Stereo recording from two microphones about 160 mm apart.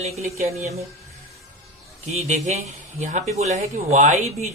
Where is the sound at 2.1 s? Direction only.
45° right (ahead or behind).